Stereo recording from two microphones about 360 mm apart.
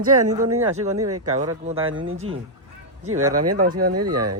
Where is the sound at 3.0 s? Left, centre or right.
Right.